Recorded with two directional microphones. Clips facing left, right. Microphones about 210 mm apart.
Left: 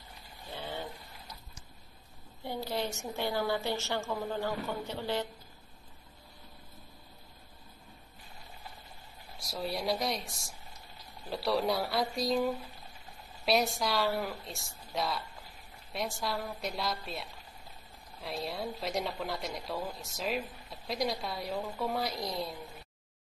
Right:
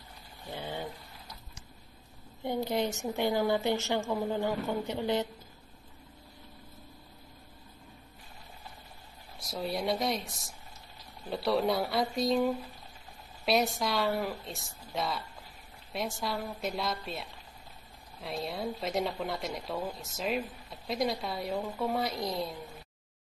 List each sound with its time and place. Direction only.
0.5 s a sound: 15° right (ahead or behind)
2.4 s a woman's voice: 20° right (ahead or behind)
9.4 s a woman's voice: centre (ahead or behind)